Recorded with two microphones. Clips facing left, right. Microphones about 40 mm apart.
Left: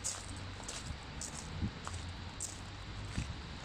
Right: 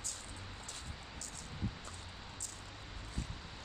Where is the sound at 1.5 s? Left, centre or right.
Centre.